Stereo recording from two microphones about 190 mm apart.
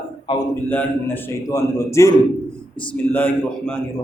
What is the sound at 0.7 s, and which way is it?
A man's voice, 10° left (ahead or behind).